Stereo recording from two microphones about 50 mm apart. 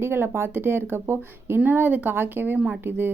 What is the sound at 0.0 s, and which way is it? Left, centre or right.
Speech, right.